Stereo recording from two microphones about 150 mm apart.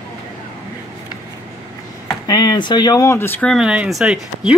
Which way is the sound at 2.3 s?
25° left (ahead or behind).